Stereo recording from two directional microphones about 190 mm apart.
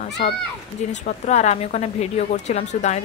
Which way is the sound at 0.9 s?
40° left (ahead or behind).